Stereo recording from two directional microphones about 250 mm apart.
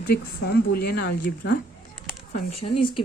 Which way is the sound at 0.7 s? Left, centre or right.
Left.